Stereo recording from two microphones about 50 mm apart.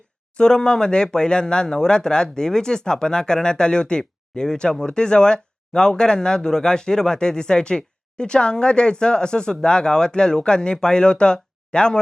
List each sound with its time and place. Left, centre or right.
0.3 s speech: centre